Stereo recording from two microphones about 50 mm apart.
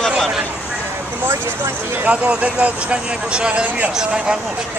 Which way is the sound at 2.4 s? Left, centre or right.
Right.